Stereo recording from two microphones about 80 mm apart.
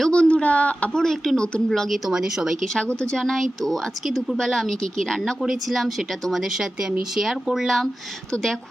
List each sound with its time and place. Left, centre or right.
0.0 s a sound: centre
1.0 s speech: centre
2.0 s speech: centre
2.7 s speech: centre